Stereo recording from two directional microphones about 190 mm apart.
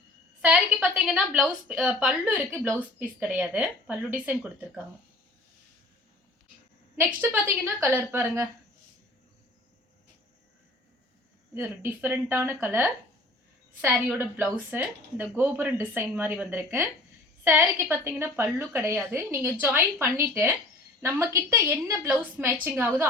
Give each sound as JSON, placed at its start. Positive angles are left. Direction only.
{"t": 0.4, "sound": "a woman's voice", "side_deg": -5}
{"t": 6.9, "sound": "a woman's voice", "side_deg": -10}
{"t": 11.5, "sound": "a woman's voice", "side_deg": -10}